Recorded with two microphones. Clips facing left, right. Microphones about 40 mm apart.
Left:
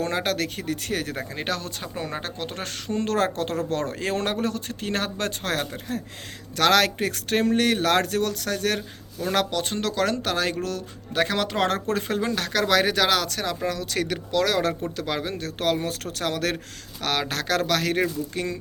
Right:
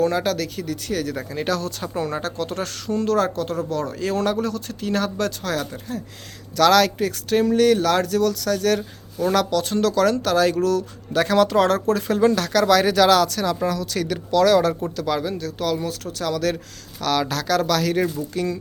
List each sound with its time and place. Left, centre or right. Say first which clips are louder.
0.0 s speech: right 4 dB; left
1.2 s speech: right 5 dB; left
2.9 s speech: right 3 dB; left
6.6 s speech: right 4 dB; left
14.3 s speech: right 8 dB; centre
14.9 s speech: right 5 dB; left
15.3 s speech: right 1 dB; left